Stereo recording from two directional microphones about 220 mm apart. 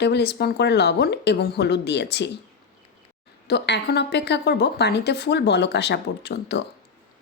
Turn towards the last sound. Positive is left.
turn(degrees=50)  # may be behind; listen again after turning